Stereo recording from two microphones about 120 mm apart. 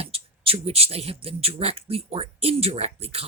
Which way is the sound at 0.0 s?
55° right (ahead or behind).